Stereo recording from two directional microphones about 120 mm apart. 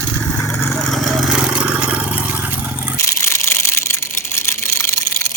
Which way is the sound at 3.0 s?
25° left (ahead or behind).